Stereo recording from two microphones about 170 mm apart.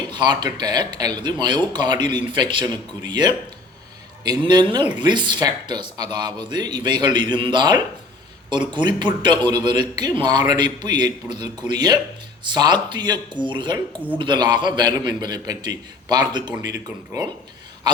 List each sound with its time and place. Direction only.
0.1 s a man's voice: 25° right (ahead or behind)